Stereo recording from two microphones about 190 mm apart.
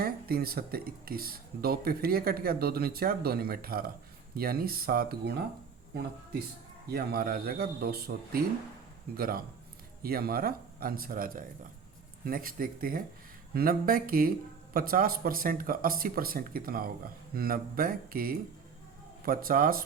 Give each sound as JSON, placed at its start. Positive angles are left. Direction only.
{"t": 0.0, "sound": "speech", "side_deg": -55}
{"t": 6.9, "sound": "speech", "side_deg": -55}